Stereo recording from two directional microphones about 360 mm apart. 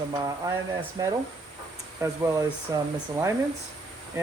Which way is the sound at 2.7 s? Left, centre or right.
Centre.